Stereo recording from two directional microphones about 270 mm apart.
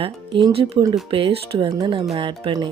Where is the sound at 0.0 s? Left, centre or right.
Centre.